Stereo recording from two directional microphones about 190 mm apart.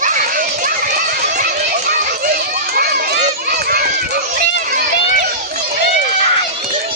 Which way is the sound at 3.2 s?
50° right (ahead or behind).